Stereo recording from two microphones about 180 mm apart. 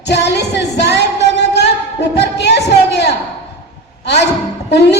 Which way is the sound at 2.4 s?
70° left (ahead or behind).